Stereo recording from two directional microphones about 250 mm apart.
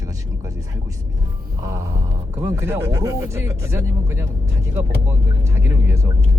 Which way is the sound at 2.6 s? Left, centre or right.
Centre.